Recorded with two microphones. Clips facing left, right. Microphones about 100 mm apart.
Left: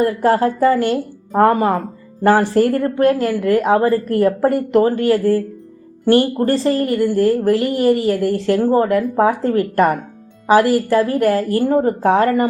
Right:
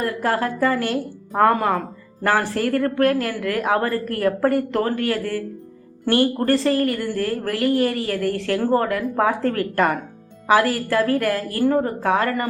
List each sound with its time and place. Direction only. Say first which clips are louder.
0.0 s a woman's voice: left 7 dB; 25° left (ahead or behind)
8.6 s speech: left 3 dB; 15° left (ahead or behind)
8.9 s a woman's voice: left 5 dB; 30° left (ahead or behind)